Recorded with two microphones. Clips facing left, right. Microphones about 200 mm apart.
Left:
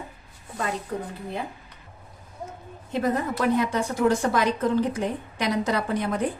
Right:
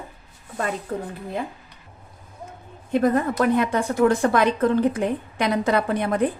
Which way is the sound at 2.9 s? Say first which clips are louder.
Right 5 dB; 55° right (ahead or behind).